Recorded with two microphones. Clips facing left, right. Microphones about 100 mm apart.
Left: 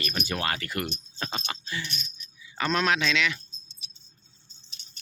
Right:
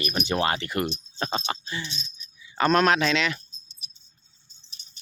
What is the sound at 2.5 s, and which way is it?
Speech, 50° right (ahead or behind).